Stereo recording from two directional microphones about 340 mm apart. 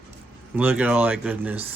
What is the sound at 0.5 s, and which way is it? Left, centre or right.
Speech, centre.